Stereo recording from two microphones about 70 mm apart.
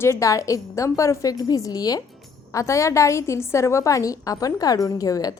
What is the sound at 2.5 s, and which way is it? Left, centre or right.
A woman's voice, left.